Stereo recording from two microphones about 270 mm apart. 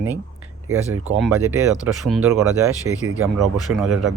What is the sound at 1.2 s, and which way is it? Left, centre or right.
Speech, centre.